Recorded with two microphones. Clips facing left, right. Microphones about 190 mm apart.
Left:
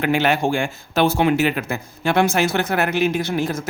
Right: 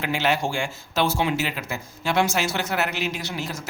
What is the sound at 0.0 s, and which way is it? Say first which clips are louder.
Speech: left 5 dB; 55° left (ahead or behind).